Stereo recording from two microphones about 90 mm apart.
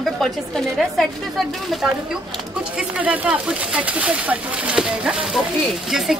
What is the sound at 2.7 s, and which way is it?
A woman's voice, 15° right (ahead or behind).